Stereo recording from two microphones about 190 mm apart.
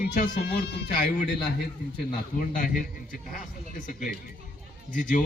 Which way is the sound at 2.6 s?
45° left (ahead or behind).